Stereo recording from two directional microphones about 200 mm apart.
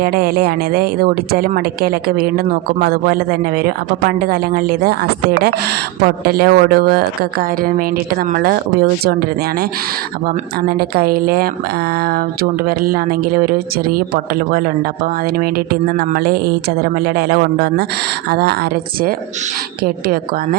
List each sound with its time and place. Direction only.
0.0 s a woman's voice: 50° right (ahead or behind)
10.2 s a woman's voice: 50° right (ahead or behind)